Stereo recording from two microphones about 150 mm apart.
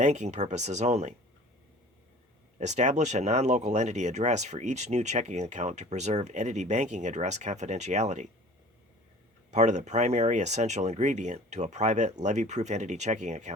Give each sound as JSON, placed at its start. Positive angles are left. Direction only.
{"t": 0.0, "sound": "speech", "side_deg": -50}
{"t": 2.6, "sound": "speech", "side_deg": -50}
{"t": 9.5, "sound": "speech", "side_deg": -50}